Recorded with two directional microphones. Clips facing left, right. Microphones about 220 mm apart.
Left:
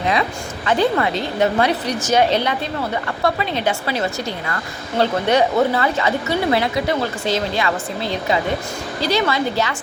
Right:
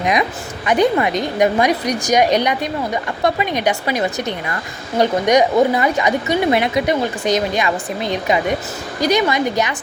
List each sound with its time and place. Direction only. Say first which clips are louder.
0.0 s a woman's voice: right 2 dB; 15° right (ahead or behind)